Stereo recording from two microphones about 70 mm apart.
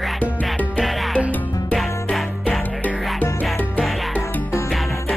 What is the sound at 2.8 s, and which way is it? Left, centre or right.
Music, left.